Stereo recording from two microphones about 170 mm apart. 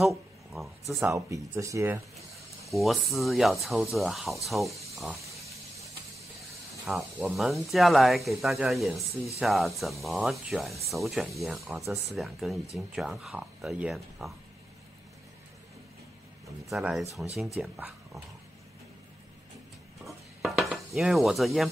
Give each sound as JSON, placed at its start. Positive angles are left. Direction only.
{"t": 0.0, "sound": "a sound", "side_deg": 0}
{"t": 1.0, "sound": "speech", "side_deg": -20}
{"t": 2.7, "sound": "speech", "side_deg": 0}
{"t": 4.9, "sound": "a sound", "side_deg": 0}
{"t": 6.9, "sound": "speech", "side_deg": -5}
{"t": 16.6, "sound": "speech", "side_deg": 0}
{"t": 20.1, "sound": "dishes", "side_deg": 0}